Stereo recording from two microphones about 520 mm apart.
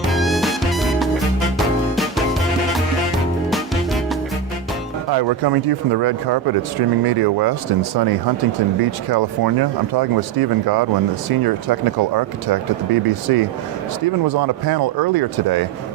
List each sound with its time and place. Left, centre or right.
0.1 s music: centre
5.1 s speech: right